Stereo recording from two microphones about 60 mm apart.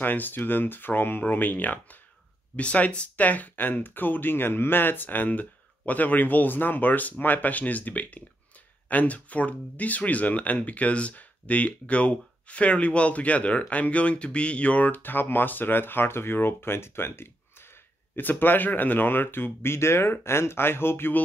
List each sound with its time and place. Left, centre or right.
0.0 s speech: left